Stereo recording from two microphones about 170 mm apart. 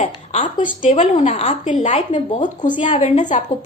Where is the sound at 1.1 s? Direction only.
45° left (ahead or behind).